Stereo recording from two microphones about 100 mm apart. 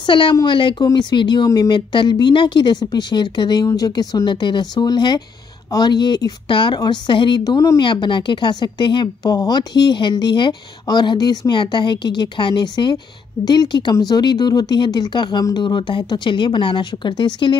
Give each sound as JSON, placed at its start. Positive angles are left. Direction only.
{"t": 0.0, "sound": "speech", "side_deg": 55}
{"t": 7.8, "sound": "speech", "side_deg": 55}